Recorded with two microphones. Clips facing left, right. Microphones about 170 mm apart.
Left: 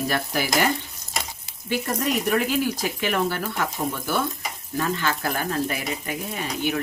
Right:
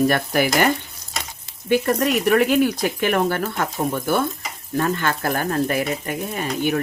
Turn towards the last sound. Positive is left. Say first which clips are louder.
# right 4 dB
turn(degrees=-50)  # may be behind; listen again after turning